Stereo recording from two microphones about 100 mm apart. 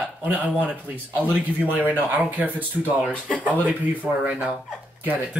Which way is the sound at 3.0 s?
10° left (ahead or behind).